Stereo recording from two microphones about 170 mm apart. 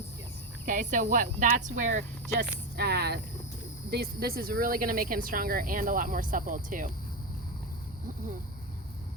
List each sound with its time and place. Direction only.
0.6 s speech: 50° right (ahead or behind)
2.4 s a woman's voice: 70° right (ahead or behind); by 6.9 s 50° right (ahead or behind)